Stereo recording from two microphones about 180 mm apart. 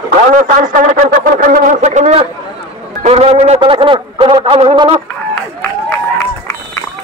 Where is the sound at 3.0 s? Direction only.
35° right (ahead or behind).